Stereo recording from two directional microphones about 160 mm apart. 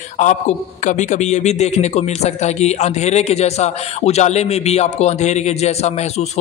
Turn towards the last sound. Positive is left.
turn(degrees=45)  # may be behind; listen again after turning